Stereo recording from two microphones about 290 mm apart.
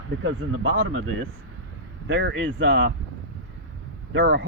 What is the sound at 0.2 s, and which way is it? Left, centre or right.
Speech, right.